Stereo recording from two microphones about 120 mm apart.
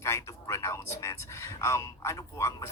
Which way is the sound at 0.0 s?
25° left (ahead or behind).